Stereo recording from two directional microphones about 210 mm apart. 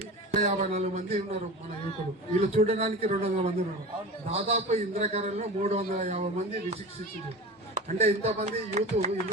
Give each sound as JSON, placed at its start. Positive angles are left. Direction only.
{"t": 0.3, "sound": "a man's voice", "side_deg": -35}
{"t": 2.4, "sound": "a man's voice", "side_deg": -30}
{"t": 7.8, "sound": "speech", "side_deg": -35}